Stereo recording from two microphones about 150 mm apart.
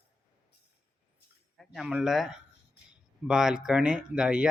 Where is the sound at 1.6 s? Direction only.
Centre (ahead or behind).